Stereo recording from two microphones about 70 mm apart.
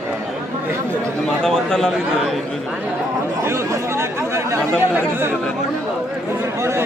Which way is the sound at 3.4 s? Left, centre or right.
Right.